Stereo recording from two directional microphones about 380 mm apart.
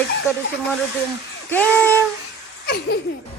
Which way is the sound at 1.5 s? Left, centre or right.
Centre.